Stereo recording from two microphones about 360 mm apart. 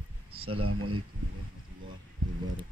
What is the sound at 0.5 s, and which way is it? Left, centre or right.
Speech, right.